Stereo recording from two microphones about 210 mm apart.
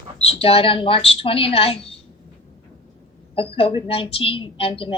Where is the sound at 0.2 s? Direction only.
30° left (ahead or behind).